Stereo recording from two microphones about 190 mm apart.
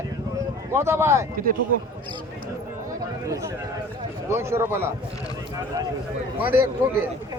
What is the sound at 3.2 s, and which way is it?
A man's voice, 15° right (ahead or behind).